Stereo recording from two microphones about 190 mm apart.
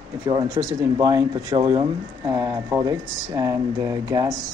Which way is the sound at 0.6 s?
15° right (ahead or behind).